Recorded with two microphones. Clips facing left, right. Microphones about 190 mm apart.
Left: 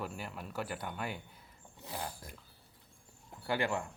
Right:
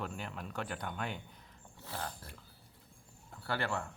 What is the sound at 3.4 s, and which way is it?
Cutlery, 15° left (ahead or behind).